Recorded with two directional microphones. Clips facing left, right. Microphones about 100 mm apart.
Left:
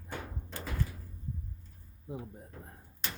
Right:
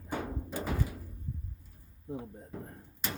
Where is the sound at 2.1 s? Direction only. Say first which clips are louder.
Right 2 dB; 10° left (ahead or behind).